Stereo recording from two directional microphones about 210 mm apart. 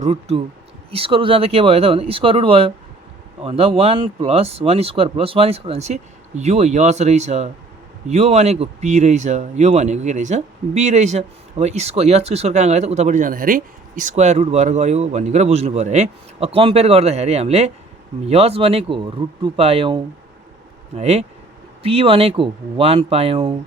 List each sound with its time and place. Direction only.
0.0 s speech: 30° right (ahead or behind)